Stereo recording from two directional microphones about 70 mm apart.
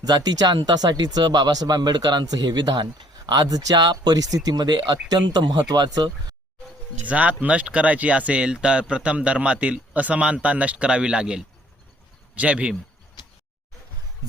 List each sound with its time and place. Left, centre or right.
0.0 s speech: right
3.2 s speech: right
7.0 s speech: centre
13.2 s a sound: left